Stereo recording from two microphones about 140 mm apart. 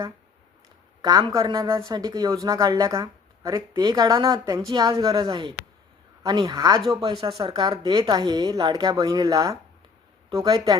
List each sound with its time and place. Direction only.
1.3 s speech: 25° right (ahead or behind)
5.3 s speech: 40° right (ahead or behind)
6.2 s speech: 30° right (ahead or behind)
7.2 s speech: 40° right (ahead or behind)